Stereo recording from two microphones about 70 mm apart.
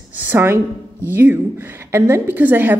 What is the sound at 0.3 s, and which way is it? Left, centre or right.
A woman's voice, right.